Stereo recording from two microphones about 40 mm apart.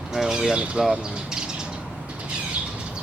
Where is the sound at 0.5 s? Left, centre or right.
Right.